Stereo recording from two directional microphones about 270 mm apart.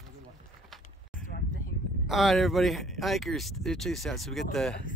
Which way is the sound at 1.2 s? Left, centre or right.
Left.